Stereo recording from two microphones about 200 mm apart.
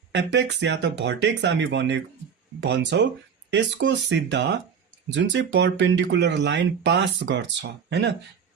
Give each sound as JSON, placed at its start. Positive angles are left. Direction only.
{"t": 0.1, "sound": "speech", "side_deg": -60}